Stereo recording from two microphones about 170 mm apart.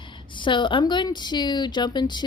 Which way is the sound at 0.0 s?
30° left (ahead or behind).